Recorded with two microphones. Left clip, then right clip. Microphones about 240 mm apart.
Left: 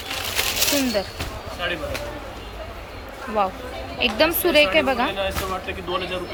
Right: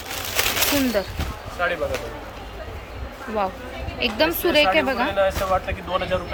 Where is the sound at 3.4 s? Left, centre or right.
Centre.